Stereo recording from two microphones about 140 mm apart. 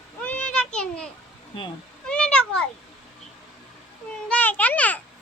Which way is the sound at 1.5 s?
40° left (ahead or behind).